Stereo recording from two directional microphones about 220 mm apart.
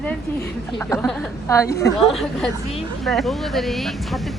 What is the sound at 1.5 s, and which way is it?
Speech, 15° left (ahead or behind).